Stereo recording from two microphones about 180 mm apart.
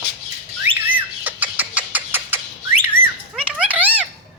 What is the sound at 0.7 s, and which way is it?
Bird, 10° right (ahead or behind).